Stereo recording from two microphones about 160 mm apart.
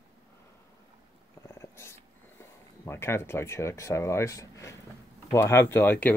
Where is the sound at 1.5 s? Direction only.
15° left (ahead or behind).